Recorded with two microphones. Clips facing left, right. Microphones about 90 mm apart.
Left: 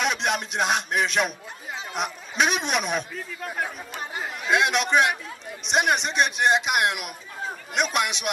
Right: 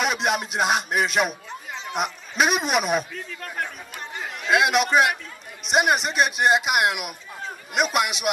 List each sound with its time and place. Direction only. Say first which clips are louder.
0.0 s music: right 2 dB; 5° right (ahead or behind)
2.0 s a man's voice: right 2 dB; 5° right (ahead or behind)